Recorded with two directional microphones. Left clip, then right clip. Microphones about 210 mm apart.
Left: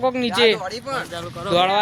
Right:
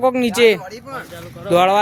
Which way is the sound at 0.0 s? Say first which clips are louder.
Right 4 dB; 35° right (ahead or behind).